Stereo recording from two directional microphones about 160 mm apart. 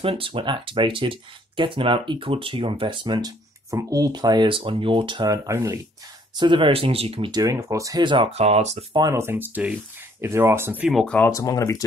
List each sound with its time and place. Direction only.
0.0 s speech: 35° right (ahead or behind)
8.9 s speech: 20° right (ahead or behind); by 11.1 s centre (ahead or behind)
11.1 s speech: 20° left (ahead or behind)